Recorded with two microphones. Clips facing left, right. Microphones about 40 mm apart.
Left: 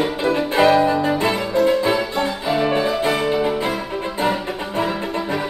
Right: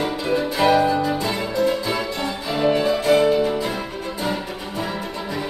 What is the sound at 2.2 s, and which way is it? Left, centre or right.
Music, centre.